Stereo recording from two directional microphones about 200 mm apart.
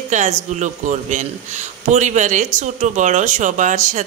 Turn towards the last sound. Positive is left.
turn(degrees=-40)  # may be behind; listen again after turning